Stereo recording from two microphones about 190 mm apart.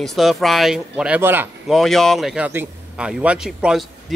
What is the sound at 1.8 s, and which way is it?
Speech, centre (ahead or behind).